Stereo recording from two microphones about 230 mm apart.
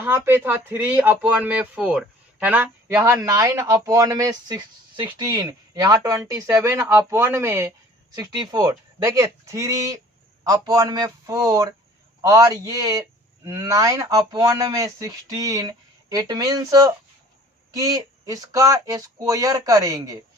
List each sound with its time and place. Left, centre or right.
0.0 s speech: centre